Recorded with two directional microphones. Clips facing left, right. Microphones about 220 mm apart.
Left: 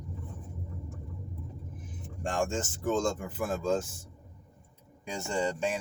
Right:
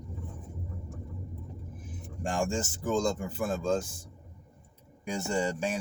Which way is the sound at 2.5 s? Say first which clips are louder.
Even; centre (ahead or behind).